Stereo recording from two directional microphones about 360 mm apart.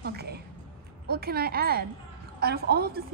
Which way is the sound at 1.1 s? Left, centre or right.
Right.